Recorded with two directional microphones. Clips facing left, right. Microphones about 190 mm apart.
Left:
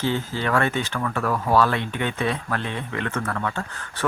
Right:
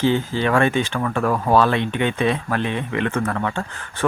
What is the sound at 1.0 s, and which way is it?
Speech, 30° right (ahead or behind).